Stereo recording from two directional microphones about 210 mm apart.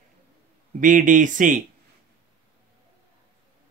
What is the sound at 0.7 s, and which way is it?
Speech, 40° right (ahead or behind).